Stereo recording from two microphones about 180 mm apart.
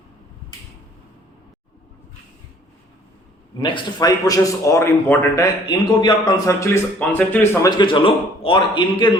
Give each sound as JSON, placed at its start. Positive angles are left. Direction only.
{"t": 3.6, "sound": "a man's voice", "side_deg": 20}